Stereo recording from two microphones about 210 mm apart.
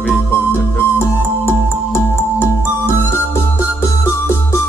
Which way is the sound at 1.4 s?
10° left (ahead or behind).